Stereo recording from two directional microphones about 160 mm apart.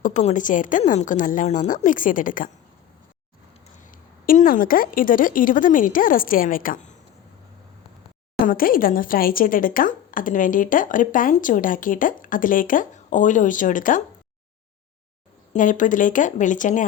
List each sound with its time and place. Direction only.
0.0 s a woman's voice: 45° left (ahead or behind)
3.9 s speech: 60° left (ahead or behind)
8.4 s speech: 65° left (ahead or behind)
15.5 s a woman's voice: 55° left (ahead or behind)